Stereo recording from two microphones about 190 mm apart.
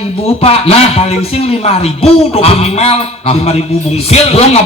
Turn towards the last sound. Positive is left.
turn(degrees=35)  # may be behind; listen again after turning